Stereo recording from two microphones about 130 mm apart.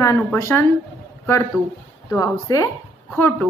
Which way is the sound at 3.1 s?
15° left (ahead or behind).